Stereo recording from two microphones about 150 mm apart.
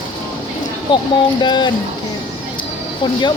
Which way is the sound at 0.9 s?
30° left (ahead or behind).